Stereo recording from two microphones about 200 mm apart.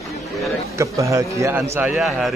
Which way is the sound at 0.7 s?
15° right (ahead or behind).